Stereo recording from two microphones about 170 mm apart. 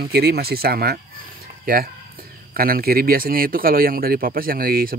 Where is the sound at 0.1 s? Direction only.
70° right (ahead or behind).